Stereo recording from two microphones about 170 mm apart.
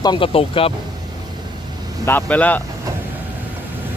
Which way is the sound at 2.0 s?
10° left (ahead or behind).